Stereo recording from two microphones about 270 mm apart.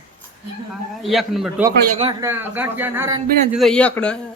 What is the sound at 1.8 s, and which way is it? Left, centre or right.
Speech, right.